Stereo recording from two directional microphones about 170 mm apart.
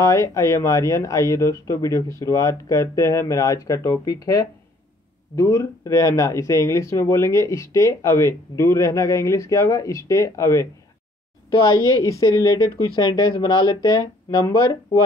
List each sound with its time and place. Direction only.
0.0 s speech: 20° left (ahead or behind)
11.9 s speech: 20° left (ahead or behind)